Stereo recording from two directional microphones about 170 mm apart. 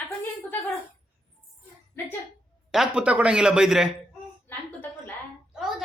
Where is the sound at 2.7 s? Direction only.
5° right (ahead or behind).